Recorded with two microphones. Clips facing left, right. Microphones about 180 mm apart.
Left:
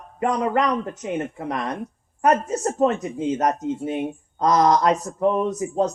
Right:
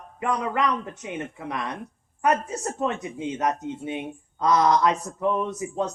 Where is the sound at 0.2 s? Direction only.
45° left (ahead or behind).